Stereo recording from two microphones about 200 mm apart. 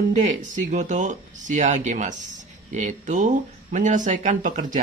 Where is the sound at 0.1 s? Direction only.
40° right (ahead or behind).